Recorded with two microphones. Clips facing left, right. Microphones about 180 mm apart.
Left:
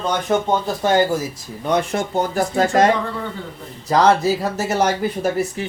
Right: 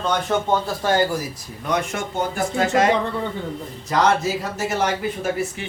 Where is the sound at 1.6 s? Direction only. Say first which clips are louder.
Left 4 dB; 30° left (ahead or behind).